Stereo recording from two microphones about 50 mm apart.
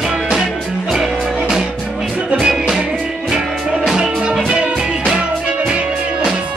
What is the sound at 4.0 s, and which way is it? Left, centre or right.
Music, centre.